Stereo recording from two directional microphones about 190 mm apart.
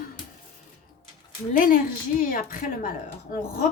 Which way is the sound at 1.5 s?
45° left (ahead or behind).